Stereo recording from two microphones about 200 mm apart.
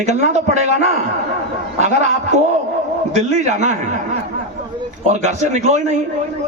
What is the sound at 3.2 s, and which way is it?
Speech, 35° right (ahead or behind).